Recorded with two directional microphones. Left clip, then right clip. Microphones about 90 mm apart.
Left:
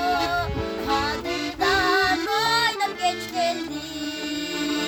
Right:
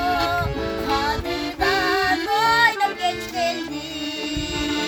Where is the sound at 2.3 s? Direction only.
35° left (ahead or behind).